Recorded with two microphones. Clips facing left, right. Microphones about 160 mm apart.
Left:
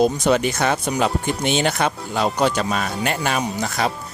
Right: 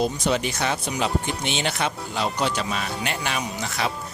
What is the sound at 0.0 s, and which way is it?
Speech, 50° left (ahead or behind).